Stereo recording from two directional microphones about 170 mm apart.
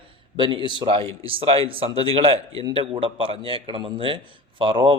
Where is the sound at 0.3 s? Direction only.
30° right (ahead or behind).